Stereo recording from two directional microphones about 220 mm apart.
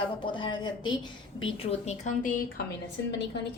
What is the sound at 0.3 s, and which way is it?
Speech, 20° left (ahead or behind).